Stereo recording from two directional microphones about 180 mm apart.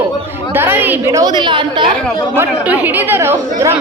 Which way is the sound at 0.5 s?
10° right (ahead or behind).